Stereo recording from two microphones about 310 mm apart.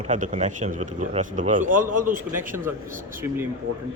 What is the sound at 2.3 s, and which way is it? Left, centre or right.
Speech, centre.